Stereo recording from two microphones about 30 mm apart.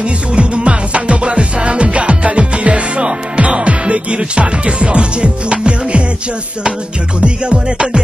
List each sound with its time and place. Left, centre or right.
0.0 s music: right
7.2 s music: right